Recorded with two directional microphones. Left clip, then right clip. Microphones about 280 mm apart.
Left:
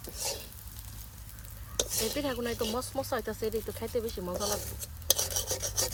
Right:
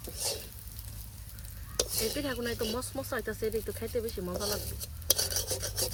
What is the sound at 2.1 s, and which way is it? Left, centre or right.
Speech, centre.